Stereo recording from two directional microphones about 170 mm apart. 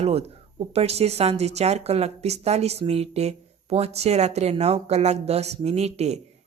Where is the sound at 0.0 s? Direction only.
35° right (ahead or behind).